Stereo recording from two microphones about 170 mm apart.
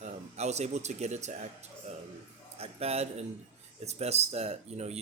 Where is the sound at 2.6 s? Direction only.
35° right (ahead or behind).